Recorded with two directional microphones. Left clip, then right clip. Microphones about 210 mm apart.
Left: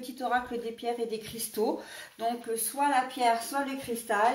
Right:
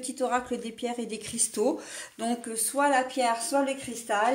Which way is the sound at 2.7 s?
45° right (ahead or behind).